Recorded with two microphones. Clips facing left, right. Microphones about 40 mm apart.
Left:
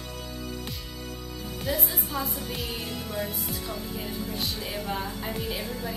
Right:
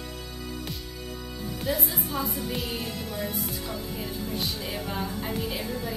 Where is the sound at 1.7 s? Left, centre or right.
Centre.